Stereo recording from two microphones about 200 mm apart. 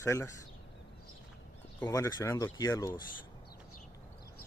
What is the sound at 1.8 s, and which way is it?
Speech, 15° left (ahead or behind).